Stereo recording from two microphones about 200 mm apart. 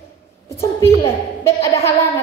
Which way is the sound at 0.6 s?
15° left (ahead or behind).